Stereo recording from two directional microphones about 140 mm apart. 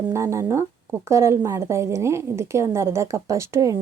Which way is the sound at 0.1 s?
20° right (ahead or behind).